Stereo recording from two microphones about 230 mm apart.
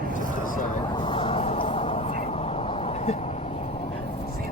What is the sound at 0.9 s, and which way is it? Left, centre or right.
Vehicle, left.